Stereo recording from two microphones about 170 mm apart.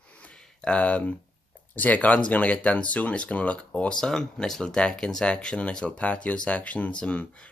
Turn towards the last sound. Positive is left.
turn(degrees=10)  # may be behind; listen again after turning